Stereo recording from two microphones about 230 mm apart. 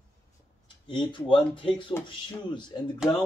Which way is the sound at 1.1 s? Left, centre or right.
Left.